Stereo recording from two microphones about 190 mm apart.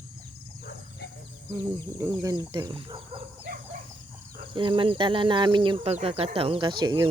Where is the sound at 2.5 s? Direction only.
25° right (ahead or behind).